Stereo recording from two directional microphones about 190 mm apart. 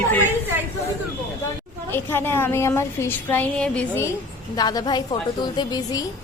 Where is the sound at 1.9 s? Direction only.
10° left (ahead or behind).